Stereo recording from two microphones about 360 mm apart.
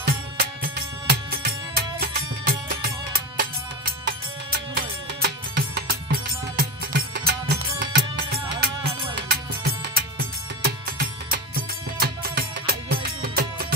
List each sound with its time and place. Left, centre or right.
0.0 s music: right